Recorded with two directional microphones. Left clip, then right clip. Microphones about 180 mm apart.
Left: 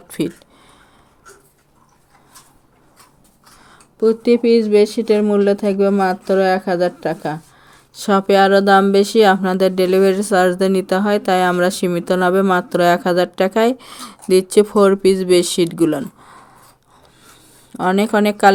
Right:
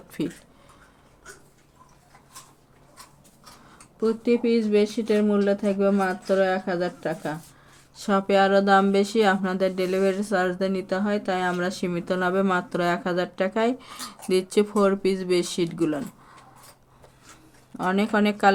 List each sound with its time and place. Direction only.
0.1 s speech: 45° left (ahead or behind)
3.6 s speech: 45° left (ahead or behind)
17.7 s a woman's voice: 40° left (ahead or behind)